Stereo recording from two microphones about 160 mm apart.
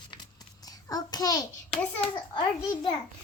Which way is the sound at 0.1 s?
25° left (ahead or behind).